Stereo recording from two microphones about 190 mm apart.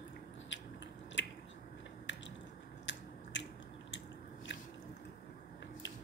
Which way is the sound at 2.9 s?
75° left (ahead or behind).